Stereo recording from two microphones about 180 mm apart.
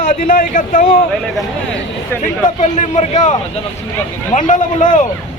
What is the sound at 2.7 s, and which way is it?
Speech, 40° left (ahead or behind).